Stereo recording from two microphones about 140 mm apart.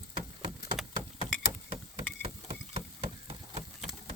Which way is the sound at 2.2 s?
45° right (ahead or behind).